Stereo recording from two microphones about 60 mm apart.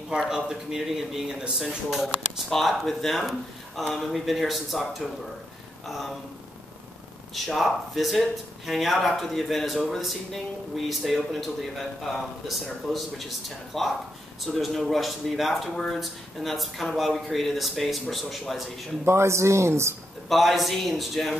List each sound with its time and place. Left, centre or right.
0.3 s a man's voice: centre
7.3 s speech: centre
19.0 s speech: right
20.2 s speech: centre